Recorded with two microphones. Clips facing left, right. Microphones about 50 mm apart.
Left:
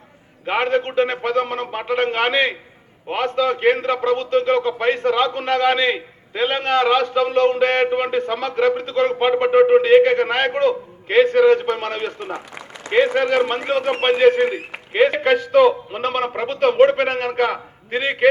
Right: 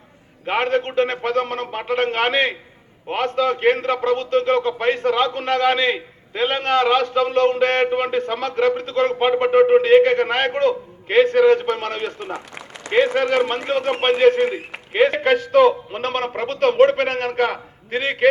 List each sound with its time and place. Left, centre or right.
0.5 s a man's voice: centre